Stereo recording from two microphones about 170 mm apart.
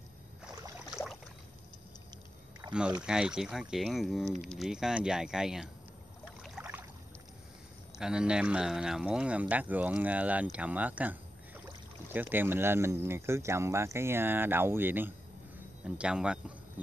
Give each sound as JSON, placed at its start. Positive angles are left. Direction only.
{"t": 2.6, "sound": "rowboat", "side_deg": -25}
{"t": 3.1, "sound": "speech", "side_deg": -5}
{"t": 6.6, "sound": "a sound", "side_deg": -15}
{"t": 8.0, "sound": "speech", "side_deg": -5}